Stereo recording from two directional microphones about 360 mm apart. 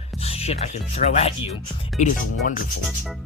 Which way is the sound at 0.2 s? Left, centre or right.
Centre.